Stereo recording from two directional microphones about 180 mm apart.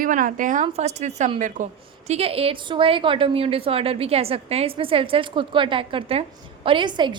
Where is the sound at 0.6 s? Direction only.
35° right (ahead or behind).